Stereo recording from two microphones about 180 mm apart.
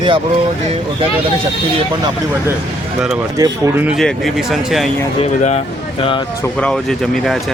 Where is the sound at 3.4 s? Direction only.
10° right (ahead or behind).